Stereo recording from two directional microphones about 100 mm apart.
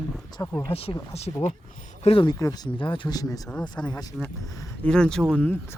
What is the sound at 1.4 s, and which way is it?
Speech, 90° left.